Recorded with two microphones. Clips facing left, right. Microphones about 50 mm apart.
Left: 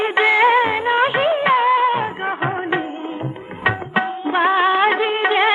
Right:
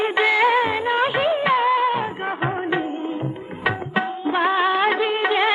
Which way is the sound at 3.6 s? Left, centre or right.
Centre.